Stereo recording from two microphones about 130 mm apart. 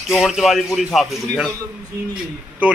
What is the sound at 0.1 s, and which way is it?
A man's voice, centre (ahead or behind).